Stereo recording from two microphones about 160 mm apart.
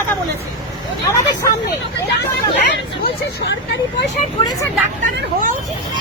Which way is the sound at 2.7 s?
90° left.